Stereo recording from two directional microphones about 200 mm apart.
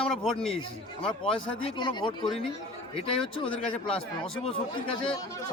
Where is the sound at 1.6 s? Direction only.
25° left (ahead or behind).